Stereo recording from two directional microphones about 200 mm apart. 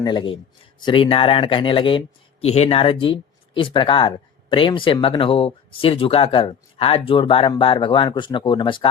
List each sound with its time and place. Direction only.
0.0 s speech: 25° left (ahead or behind)